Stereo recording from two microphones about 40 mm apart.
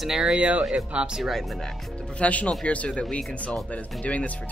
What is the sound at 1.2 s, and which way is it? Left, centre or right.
Speech, centre.